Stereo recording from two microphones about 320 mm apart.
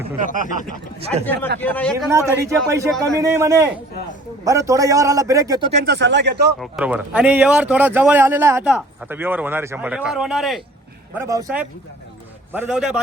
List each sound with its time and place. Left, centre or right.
1.5 s speech: centre
2.0 s a man's voice: centre
5.8 s speech: right
6.6 s a man's voice: centre